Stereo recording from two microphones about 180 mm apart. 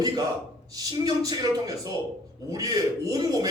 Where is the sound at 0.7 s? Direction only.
20° right (ahead or behind).